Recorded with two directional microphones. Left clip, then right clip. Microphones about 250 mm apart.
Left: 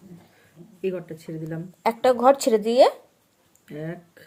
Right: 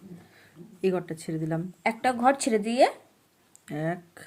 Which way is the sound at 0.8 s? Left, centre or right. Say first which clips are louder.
Right 1 dB; right.